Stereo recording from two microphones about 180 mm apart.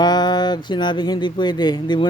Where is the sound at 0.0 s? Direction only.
25° left (ahead or behind).